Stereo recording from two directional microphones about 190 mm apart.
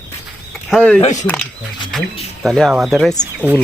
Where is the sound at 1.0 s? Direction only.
40° left (ahead or behind).